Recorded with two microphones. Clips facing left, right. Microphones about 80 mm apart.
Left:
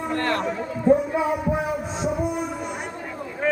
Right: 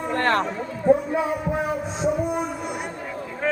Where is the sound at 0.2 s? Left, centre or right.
Right.